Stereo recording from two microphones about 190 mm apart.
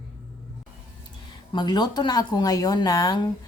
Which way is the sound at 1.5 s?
20° left (ahead or behind).